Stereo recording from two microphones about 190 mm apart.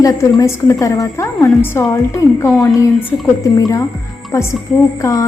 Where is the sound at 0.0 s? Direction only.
20° left (ahead or behind).